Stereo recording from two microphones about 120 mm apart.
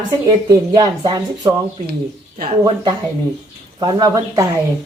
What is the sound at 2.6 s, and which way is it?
Speech, 40° right (ahead or behind).